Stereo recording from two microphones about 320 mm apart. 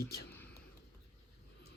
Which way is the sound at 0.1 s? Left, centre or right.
Left.